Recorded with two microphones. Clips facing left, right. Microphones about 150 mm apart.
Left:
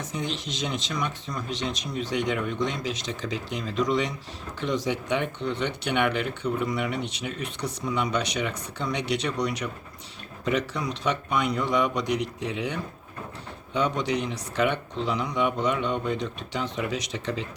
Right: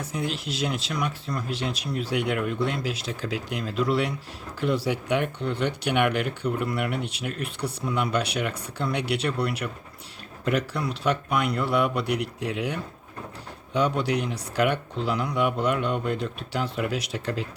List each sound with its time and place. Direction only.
0.0 s speech: 10° right (ahead or behind)